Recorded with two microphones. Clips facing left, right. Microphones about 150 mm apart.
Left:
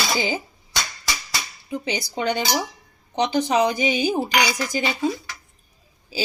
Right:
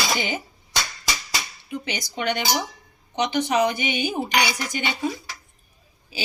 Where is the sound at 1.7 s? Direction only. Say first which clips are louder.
Left 4 dB; 30° left (ahead or behind).